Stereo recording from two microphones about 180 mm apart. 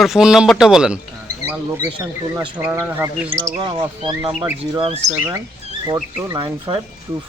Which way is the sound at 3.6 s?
25° right (ahead or behind).